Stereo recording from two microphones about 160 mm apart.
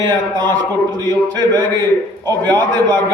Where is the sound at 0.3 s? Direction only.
25° right (ahead or behind).